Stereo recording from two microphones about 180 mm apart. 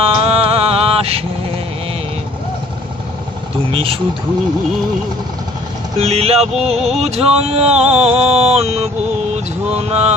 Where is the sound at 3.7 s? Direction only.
30° right (ahead or behind).